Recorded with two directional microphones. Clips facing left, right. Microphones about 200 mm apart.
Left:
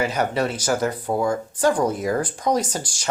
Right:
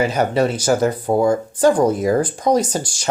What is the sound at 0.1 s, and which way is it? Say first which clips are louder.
Speech: right 5 dB; 30° right (ahead or behind).